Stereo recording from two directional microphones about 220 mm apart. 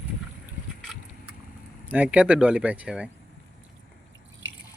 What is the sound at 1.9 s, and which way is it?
Speech, 5° right (ahead or behind).